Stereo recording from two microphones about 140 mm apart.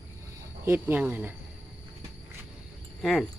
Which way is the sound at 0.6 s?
15° right (ahead or behind).